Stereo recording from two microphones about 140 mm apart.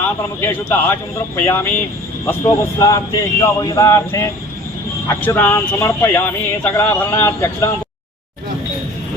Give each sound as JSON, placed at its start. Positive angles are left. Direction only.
{"t": 0.0, "sound": "a man's voice", "side_deg": 15}